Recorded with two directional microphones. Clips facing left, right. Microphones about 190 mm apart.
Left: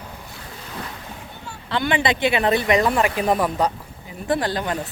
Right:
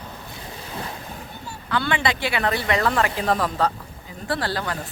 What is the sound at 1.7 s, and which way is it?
Speech, 15° left (ahead or behind).